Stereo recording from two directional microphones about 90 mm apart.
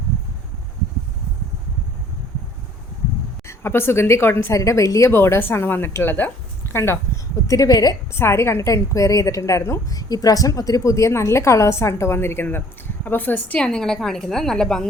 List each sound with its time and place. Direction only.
3.4 s a woman's voice: 25° left (ahead or behind)
4.5 s a woman's voice: 35° left (ahead or behind)
7.4 s a woman's voice: 40° left (ahead or behind)
8.1 s a woman's voice: 30° left (ahead or behind)
13.6 s a woman's voice: 10° left (ahead or behind)